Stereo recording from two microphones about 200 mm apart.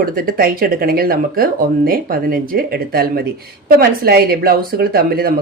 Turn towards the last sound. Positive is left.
turn(degrees=-50)  # may be behind; listen again after turning